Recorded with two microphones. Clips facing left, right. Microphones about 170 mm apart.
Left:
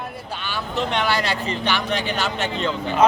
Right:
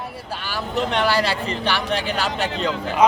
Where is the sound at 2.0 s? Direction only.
Centre (ahead or behind).